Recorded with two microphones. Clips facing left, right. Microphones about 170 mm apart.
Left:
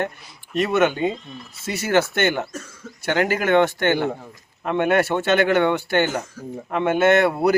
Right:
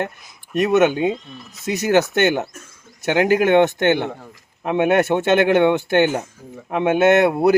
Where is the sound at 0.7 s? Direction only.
15° right (ahead or behind).